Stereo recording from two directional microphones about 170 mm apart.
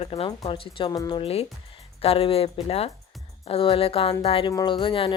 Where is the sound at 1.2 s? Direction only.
35° left (ahead or behind).